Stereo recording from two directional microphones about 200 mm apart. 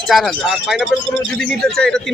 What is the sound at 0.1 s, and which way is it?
Speech, centre (ahead or behind).